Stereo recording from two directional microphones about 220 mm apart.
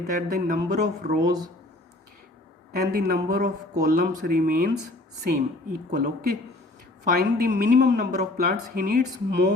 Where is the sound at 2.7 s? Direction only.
45° right (ahead or behind).